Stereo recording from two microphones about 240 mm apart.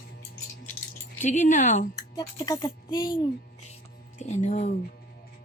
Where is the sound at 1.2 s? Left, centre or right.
Left.